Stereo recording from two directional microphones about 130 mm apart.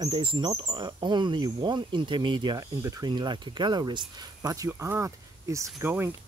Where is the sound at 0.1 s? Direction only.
40° right (ahead or behind).